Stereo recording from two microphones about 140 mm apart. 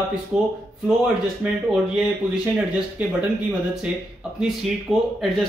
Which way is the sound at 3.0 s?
10° right (ahead or behind).